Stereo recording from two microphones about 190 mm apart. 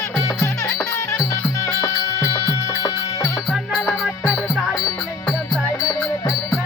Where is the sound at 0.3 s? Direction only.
5° left (ahead or behind).